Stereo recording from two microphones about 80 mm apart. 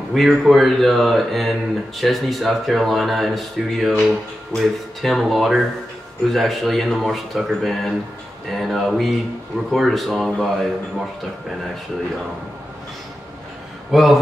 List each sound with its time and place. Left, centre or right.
0.1 s speech: centre
13.9 s speech: centre